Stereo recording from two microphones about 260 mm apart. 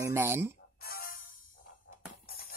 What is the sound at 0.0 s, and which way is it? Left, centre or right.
Speech, centre.